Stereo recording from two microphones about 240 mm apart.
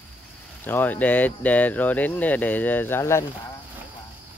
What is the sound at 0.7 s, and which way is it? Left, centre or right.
Speech, centre.